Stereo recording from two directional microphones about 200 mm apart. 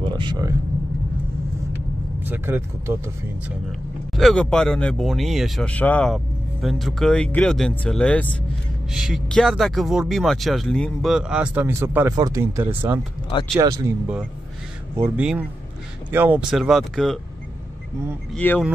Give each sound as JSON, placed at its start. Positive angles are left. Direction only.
{"t": 0.0, "sound": "vehicle", "side_deg": -20}
{"t": 2.2, "sound": "speech", "side_deg": -10}
{"t": 4.1, "sound": "speech", "side_deg": 0}
{"t": 15.0, "sound": "speech", "side_deg": -10}
{"t": 18.3, "sound": "speech", "side_deg": 10}